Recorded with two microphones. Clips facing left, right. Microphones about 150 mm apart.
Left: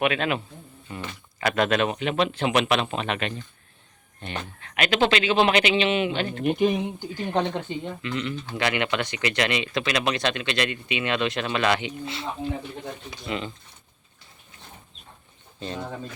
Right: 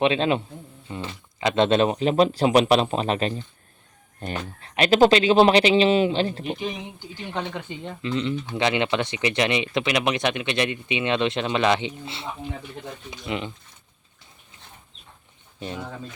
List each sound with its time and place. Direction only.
0.0 s speech: 30° right (ahead or behind)
6.6 s speech: 50° left (ahead or behind)
8.0 s speech: 25° right (ahead or behind)